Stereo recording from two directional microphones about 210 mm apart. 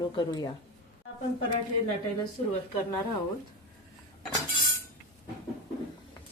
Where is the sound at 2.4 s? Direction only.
35° left (ahead or behind).